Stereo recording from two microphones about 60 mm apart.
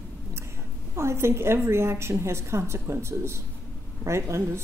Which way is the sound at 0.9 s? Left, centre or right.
Right.